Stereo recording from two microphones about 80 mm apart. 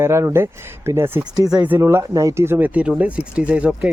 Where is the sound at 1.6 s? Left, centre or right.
Right.